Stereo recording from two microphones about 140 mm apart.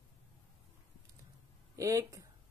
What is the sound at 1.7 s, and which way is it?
Speech, 25° right (ahead or behind).